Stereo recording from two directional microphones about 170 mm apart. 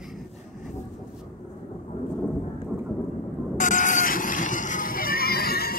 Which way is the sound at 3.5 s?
50° left (ahead or behind).